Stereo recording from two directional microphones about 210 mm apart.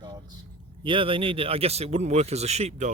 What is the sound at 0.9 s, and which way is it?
Speech, 25° right (ahead or behind).